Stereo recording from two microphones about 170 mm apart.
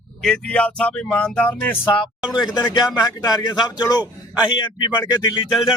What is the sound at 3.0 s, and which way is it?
Speech, 20° left (ahead or behind).